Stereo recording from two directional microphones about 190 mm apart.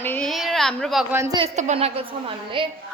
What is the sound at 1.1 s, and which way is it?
Speech, 15° right (ahead or behind).